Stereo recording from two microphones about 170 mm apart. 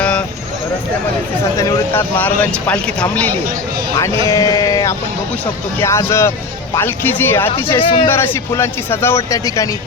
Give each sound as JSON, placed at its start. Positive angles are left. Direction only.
{"t": 0.0, "sound": "vehicle", "side_deg": 5}
{"t": 1.5, "sound": "speech", "side_deg": 20}
{"t": 4.3, "sound": "sheep", "side_deg": 20}
{"t": 5.8, "sound": "speech", "side_deg": 15}
{"t": 7.8, "sound": "speech", "side_deg": 30}
{"t": 8.1, "sound": "speech", "side_deg": 15}